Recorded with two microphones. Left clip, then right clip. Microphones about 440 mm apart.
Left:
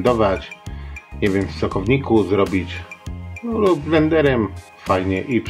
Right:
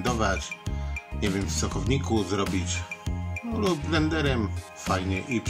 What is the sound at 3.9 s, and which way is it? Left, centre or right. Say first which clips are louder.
Speech: left 10 dB; left.